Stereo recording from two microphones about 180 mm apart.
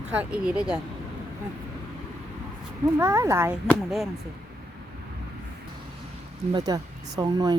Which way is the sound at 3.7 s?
Centre (ahead or behind).